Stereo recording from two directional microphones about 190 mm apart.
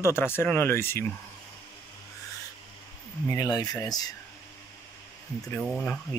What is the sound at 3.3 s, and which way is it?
Speech, 20° left (ahead or behind).